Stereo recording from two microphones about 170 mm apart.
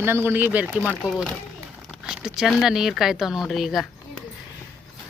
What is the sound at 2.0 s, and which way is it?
Speech, 5° right (ahead or behind).